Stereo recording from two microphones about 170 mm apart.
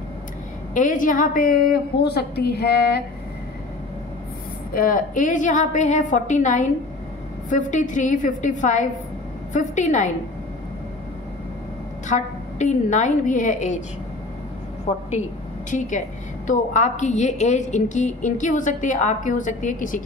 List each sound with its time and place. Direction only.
0.7 s a woman's voice: 50° left (ahead or behind); by 3.0 s 70° left (ahead or behind)
4.7 s a woman's voice: 55° left (ahead or behind)
12.1 s a woman's voice: 45° left (ahead or behind)
14.9 s a woman's voice: 45° left (ahead or behind)